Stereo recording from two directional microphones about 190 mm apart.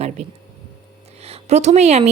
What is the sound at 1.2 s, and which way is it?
Speech, 35° right (ahead or behind).